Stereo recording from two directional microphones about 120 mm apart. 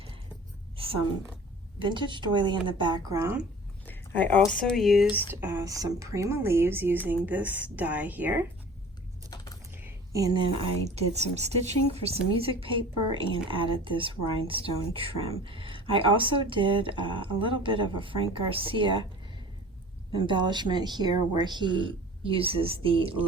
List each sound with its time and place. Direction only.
1.8 s speech: 40° right (ahead or behind)
3.1 s speech: 25° right (ahead or behind)
3.8 s speech: 15° left (ahead or behind)
4.6 s speech: centre (ahead or behind)
5.1 s speech: 20° right (ahead or behind)
10.2 s speech: 35° right (ahead or behind)
10.8 s a woman's voice: 65° right (ahead or behind); by 18.9 s 50° right (ahead or behind)
20.1 s speech: 40° right (ahead or behind)
22.2 s speech: 50° right (ahead or behind)